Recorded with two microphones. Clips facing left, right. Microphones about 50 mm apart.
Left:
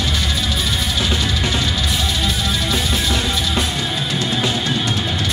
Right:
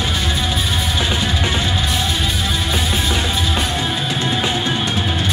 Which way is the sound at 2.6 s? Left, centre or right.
Centre.